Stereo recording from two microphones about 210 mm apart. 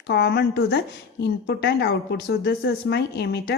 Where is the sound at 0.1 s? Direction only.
55° left (ahead or behind).